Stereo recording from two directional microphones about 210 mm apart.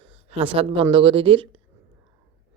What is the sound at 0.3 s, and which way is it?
Speech, 25° right (ahead or behind).